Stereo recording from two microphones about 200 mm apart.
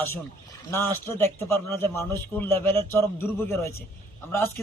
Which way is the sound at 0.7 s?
10° left (ahead or behind).